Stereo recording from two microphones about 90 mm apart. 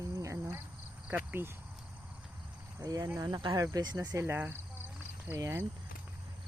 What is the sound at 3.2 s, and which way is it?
Speech, 55° right (ahead or behind).